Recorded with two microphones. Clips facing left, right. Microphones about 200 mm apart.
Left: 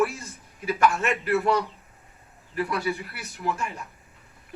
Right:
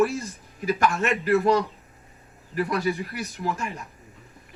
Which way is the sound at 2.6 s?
40° right (ahead or behind).